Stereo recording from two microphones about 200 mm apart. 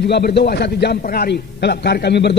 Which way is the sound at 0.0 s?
55° left (ahead or behind).